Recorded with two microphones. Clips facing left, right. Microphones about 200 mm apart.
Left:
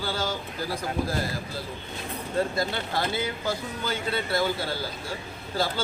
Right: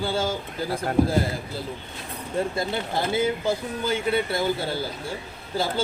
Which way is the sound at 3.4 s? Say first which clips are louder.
Right 4 dB; 25° right (ahead or behind).